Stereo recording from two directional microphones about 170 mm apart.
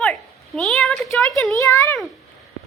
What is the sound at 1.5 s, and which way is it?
Speech, 20° left (ahead or behind).